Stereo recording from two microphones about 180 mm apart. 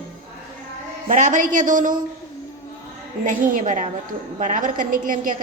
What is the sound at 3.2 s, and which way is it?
A woman's voice, 50° right (ahead or behind).